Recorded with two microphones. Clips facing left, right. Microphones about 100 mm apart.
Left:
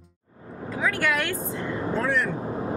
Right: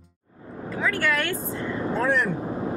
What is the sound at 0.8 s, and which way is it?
Vehicle, 15° left (ahead or behind).